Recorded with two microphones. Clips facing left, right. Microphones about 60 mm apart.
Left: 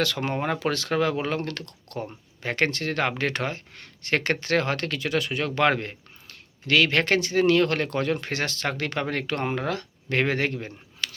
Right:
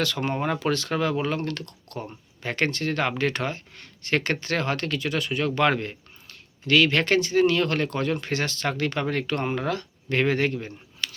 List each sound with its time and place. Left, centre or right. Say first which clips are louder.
0.0 s speech: even; left
0.3 s speech: even; left
0.6 s speech: left 1 dB; left
1.4 s speech: right 1 dB; left
2.4 s speech: left 1 dB; left
5.5 s speech: left 2 dB; left